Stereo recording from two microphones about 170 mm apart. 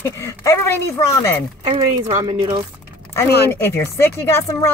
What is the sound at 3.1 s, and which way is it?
Speech, 15° left (ahead or behind).